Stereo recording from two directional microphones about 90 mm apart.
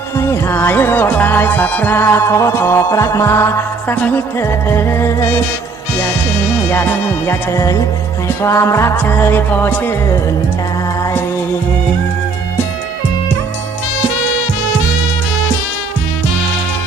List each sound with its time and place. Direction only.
0.2 s music: 30° left (ahead or behind)
2.0 s music: 30° left (ahead or behind)
3.8 s music: 20° left (ahead or behind)
7.3 s music: 35° left (ahead or behind)